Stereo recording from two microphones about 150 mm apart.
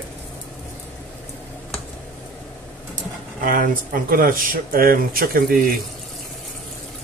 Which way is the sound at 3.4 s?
65° right (ahead or behind).